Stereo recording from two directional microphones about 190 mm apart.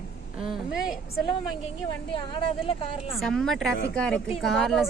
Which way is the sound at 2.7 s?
30° left (ahead or behind).